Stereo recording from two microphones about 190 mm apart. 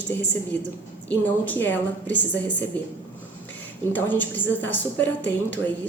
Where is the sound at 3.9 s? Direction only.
10° left (ahead or behind).